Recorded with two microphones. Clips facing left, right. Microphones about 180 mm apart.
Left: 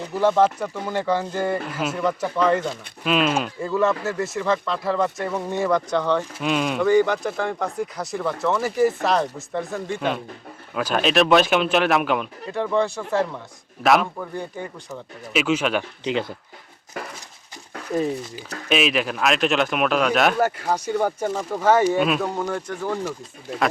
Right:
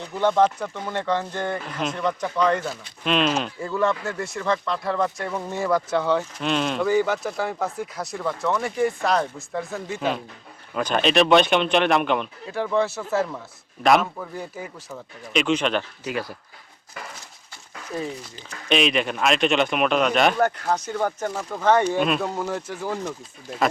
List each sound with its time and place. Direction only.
0.0 s speech: 5° left (ahead or behind)
6.4 s speech: 5° left (ahead or behind)
6.8 s speech: 5° right (ahead or behind)
15.3 s speech: 5° left (ahead or behind)
16.0 s speech: 25° left (ahead or behind)
18.3 s speech: 5° left (ahead or behind)